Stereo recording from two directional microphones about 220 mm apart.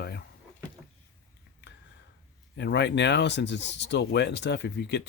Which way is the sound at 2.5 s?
50° left (ahead or behind).